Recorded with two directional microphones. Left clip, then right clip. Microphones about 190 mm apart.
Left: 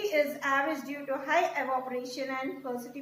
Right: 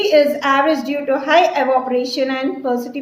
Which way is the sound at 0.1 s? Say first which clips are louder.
Right 15 dB; 55° right (ahead or behind).